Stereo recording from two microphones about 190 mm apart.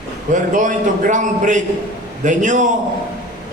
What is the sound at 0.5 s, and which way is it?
A man's voice, 40° right (ahead or behind).